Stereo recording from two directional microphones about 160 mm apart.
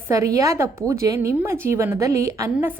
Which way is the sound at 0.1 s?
20° right (ahead or behind).